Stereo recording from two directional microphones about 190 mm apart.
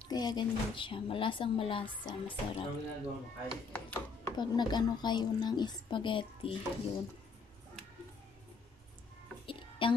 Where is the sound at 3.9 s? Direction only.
20° left (ahead or behind).